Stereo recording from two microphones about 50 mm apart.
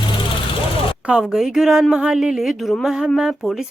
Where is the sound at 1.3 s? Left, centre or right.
Centre.